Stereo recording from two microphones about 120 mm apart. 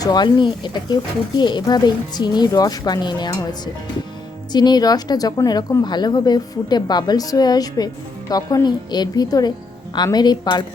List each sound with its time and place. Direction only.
0.0 s a woman's voice: 35° left (ahead or behind)
4.5 s a woman's voice: 35° left (ahead or behind)